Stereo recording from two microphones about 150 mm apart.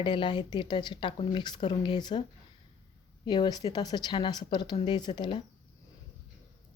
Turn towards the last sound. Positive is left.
turn(degrees=30)  # may be behind; listen again after turning